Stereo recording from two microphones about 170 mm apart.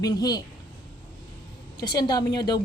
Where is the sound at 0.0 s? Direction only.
20° left (ahead or behind).